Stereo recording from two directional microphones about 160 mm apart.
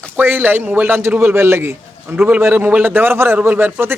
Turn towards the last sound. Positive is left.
turn(degrees=-15)  # may be behind; listen again after turning